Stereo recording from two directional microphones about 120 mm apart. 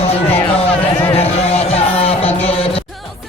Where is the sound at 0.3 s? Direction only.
15° left (ahead or behind).